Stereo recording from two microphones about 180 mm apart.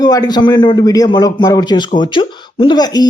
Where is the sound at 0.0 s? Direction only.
20° left (ahead or behind).